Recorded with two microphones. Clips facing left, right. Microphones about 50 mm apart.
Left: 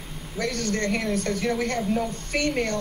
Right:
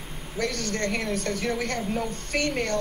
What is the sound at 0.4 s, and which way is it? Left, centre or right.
Speech, left.